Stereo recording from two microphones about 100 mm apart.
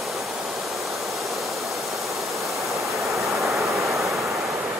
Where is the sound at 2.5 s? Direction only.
Centre (ahead or behind).